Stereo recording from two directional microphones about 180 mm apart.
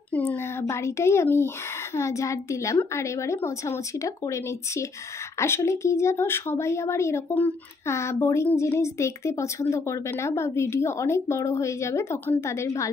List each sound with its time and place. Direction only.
0.1 s speech: 10° left (ahead or behind)